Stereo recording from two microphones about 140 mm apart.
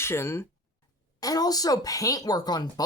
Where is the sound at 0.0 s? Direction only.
20° left (ahead or behind).